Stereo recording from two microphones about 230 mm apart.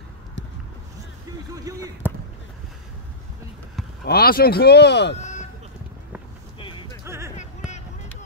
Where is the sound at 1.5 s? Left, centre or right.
Centre.